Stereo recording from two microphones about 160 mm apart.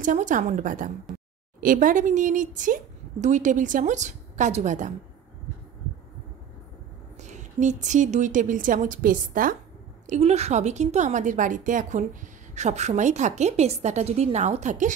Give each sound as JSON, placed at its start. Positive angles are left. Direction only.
{"t": 0.0, "sound": "a woman's voice", "side_deg": -50}
{"t": 7.2, "sound": "a woman's voice", "side_deg": -50}
{"t": 10.0, "sound": "a woman's voice", "side_deg": -45}